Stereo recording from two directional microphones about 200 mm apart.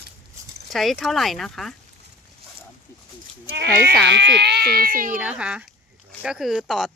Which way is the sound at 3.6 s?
60° right (ahead or behind).